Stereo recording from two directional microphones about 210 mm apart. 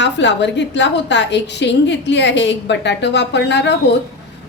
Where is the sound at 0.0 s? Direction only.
55° left (ahead or behind).